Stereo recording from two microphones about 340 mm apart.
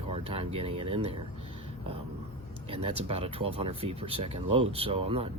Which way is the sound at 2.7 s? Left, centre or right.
Centre.